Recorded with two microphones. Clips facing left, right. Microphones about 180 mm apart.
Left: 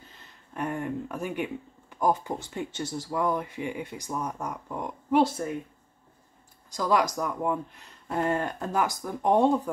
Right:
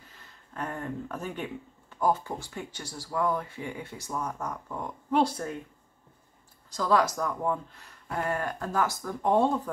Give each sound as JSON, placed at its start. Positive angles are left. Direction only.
{"t": 0.6, "sound": "speech", "side_deg": 15}
{"t": 6.7, "sound": "speech", "side_deg": 15}